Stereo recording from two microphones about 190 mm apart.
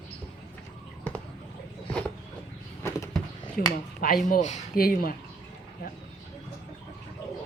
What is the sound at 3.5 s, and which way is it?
Speech, 50° left (ahead or behind).